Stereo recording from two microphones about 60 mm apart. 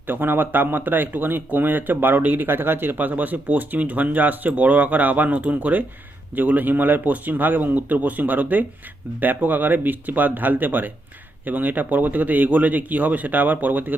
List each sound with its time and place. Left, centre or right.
0.1 s speech: right